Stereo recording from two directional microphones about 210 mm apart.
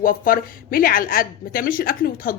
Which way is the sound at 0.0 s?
40° left (ahead or behind).